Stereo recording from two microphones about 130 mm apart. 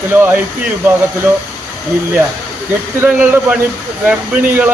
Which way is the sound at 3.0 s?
15° right (ahead or behind).